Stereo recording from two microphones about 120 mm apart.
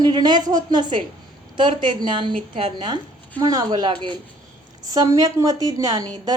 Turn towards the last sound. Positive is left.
turn(degrees=-30)  # may be behind; listen again after turning